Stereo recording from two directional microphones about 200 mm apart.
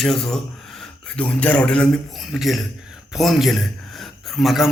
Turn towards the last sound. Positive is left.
turn(degrees=0)  # may be behind; listen again after turning